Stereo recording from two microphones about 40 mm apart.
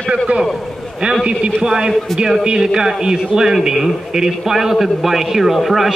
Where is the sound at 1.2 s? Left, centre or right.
Right.